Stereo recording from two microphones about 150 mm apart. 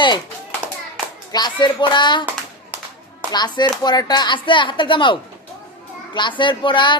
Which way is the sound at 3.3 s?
30° left (ahead or behind).